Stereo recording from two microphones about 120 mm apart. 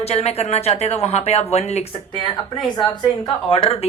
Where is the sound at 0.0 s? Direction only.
60° left (ahead or behind).